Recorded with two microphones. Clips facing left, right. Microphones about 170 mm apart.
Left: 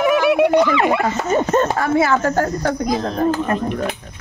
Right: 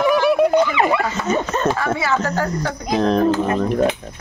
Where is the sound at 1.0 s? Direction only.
50° left (ahead or behind).